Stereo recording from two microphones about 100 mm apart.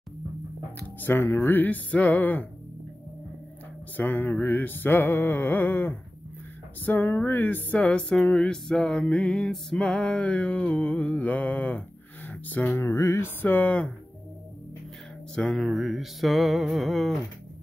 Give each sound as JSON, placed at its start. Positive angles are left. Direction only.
{"t": 0.7, "sound": "music", "side_deg": 20}
{"t": 3.9, "sound": "music", "side_deg": 15}
{"t": 15.3, "sound": "music", "side_deg": 5}